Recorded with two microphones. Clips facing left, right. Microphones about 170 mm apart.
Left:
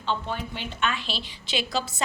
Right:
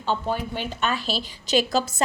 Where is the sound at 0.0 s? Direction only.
45° right (ahead or behind).